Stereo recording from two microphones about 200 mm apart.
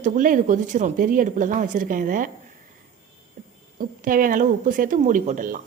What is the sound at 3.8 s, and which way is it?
Speech, 45° right (ahead or behind).